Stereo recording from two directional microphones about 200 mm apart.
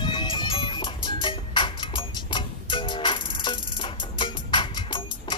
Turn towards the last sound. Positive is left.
turn(degrees=25)  # may be behind; listen again after turning